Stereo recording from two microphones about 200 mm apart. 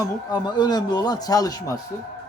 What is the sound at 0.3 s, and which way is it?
A man's voice, 20° left (ahead or behind).